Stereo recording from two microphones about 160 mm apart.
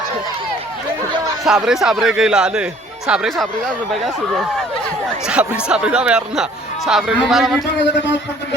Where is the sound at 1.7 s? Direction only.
5° right (ahead or behind).